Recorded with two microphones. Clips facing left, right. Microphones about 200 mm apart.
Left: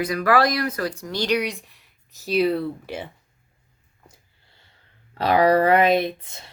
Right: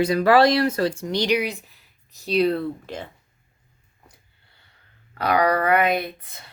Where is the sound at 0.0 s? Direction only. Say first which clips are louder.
Right 4 dB; 30° right (ahead or behind).